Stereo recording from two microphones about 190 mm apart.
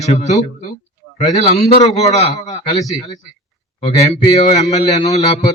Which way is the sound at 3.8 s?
30° left (ahead or behind).